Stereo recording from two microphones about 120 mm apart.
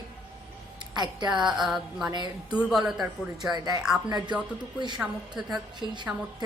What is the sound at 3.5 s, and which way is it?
A woman's voice, 35° right (ahead or behind).